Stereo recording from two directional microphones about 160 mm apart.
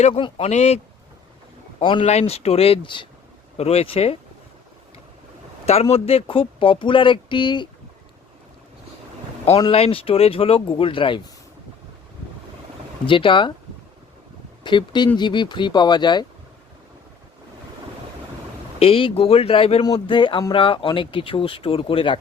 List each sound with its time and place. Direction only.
0.0 s speech: 35° left (ahead or behind)
1.8 s speech: 30° left (ahead or behind)
2.0 s speech: 40° left (ahead or behind)
5.6 s speech: 40° left (ahead or behind)
9.6 s speech: 35° left (ahead or behind)
13.1 s speech: 30° left (ahead or behind)
14.6 s speech: 30° left (ahead or behind)
18.8 s speech: 35° left (ahead or behind)